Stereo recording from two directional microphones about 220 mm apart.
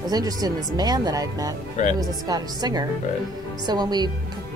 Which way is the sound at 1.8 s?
35° left (ahead or behind).